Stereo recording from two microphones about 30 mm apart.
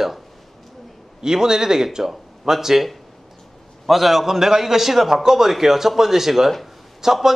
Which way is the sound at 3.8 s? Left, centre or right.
Centre.